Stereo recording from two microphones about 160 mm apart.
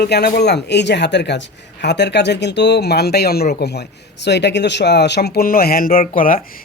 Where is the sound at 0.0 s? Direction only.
85° left.